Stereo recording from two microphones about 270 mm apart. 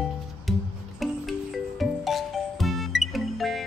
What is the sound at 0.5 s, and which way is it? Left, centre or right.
Music, centre.